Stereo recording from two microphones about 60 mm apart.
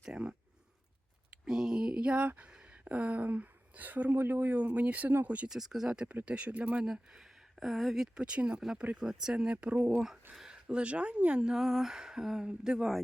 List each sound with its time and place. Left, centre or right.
0.0 s a sound: centre
1.5 s speech: centre; by 5.5 s right
5.5 s speech: centre; by 6.8 s right
6.8 s speech: centre
11.5 s speech: centre